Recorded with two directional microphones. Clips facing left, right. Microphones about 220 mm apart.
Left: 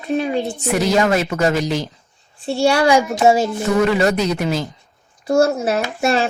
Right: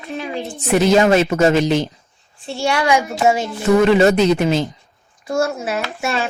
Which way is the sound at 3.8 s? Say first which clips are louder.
Right 5 dB; 25° right (ahead or behind).